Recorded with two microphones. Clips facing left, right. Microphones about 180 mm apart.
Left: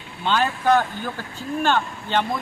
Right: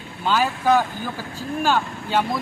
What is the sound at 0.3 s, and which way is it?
A man's voice, 5° right (ahead or behind).